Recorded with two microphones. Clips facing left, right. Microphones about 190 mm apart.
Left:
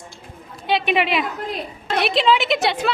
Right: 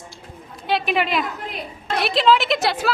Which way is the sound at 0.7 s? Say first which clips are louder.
Left 2 dB; centre (ahead or behind).